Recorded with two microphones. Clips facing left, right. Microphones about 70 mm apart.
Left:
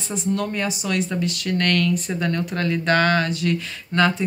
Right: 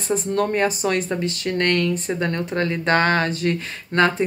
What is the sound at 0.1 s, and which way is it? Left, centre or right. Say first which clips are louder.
Speech: right 4 dB; right.